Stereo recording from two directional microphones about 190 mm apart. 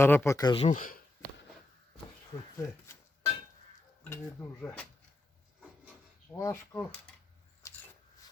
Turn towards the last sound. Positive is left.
turn(degrees=15)  # may be behind; listen again after turning